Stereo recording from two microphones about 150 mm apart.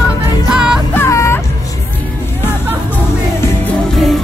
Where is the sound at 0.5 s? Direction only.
5° right (ahead or behind).